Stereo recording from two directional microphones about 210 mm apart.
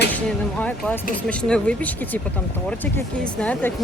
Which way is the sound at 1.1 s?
5° left (ahead or behind).